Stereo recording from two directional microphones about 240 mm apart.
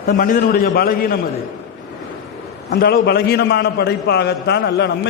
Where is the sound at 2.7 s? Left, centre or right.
Left.